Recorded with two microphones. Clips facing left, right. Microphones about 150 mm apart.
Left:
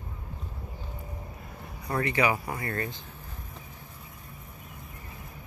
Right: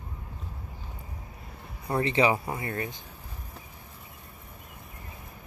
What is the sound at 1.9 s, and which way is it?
Speech, 25° right (ahead or behind).